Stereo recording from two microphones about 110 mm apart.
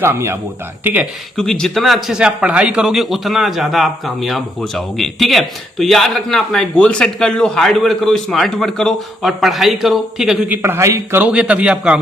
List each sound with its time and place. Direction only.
0.0 s a man's voice: 25° right (ahead or behind)
1.4 s speech: 5° left (ahead or behind)
10.5 s a man's voice: 20° right (ahead or behind)
11.2 s a man's voice: 10° right (ahead or behind)